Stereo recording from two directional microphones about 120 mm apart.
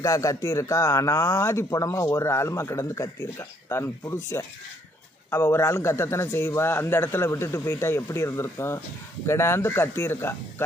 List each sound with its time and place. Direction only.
0.0 s a man's voice: 25° left (ahead or behind)